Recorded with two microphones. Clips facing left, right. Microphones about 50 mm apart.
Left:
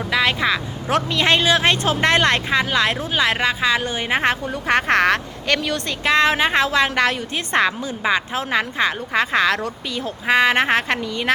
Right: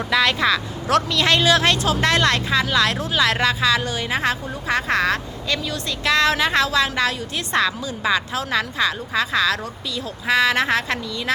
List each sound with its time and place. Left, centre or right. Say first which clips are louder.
0.1 s speech: right 1 dB; centre
1.8 s speech: left 2 dB; left
6.1 s speech: left 2 dB; left